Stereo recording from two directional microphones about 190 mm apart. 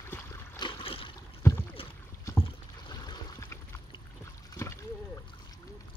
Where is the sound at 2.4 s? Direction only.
20° left (ahead or behind).